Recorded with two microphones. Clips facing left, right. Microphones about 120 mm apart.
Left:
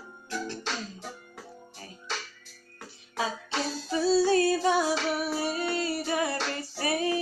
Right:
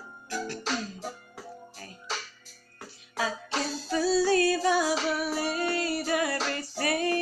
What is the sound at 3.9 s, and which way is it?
Female singing, 25° left (ahead or behind).